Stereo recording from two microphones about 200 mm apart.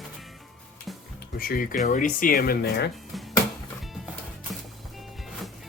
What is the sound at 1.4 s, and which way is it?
Speech, 45° left (ahead or behind).